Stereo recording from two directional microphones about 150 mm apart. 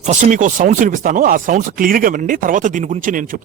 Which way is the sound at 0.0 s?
50° right (ahead or behind).